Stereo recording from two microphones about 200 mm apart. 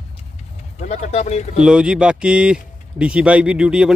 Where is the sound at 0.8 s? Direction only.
35° left (ahead or behind).